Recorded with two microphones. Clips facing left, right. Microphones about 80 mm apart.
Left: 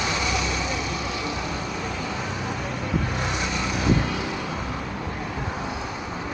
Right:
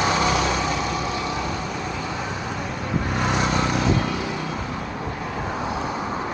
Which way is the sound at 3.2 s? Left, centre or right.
Right.